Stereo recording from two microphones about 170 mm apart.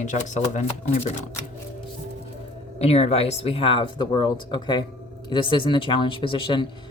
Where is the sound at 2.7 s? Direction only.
35° left (ahead or behind).